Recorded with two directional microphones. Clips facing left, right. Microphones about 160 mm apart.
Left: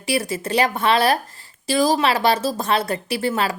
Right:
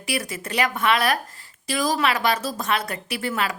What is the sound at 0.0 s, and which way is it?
A woman's voice, 30° left (ahead or behind).